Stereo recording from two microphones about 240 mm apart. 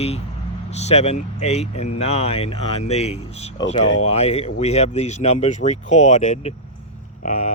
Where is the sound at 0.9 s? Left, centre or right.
Left.